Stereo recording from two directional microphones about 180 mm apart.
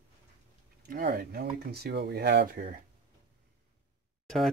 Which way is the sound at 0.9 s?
55° right (ahead or behind).